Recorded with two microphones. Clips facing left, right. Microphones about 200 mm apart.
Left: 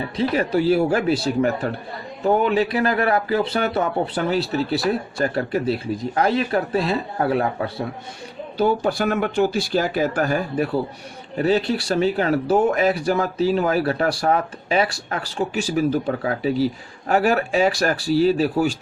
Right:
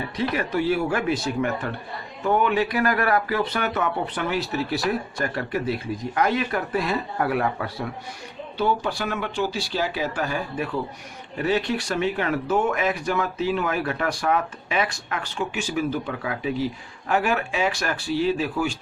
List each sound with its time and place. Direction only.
0.0 s speech: 30° left (ahead or behind)
8.5 s speech: 40° left (ahead or behind)